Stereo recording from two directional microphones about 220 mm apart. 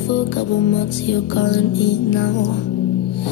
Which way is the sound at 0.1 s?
55° left (ahead or behind).